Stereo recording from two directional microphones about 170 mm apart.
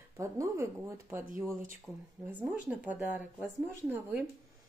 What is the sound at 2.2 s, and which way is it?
Speech, 5° right (ahead or behind).